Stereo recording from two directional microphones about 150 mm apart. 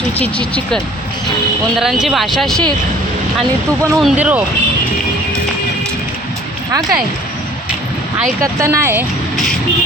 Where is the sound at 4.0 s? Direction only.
5° right (ahead or behind).